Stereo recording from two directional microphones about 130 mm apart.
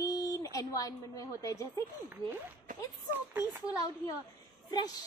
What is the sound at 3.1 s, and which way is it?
Speech, 15° right (ahead or behind).